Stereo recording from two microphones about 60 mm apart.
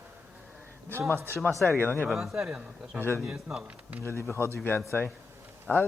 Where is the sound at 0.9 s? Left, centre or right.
Right.